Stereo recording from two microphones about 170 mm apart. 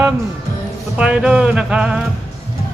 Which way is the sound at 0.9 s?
5° right (ahead or behind).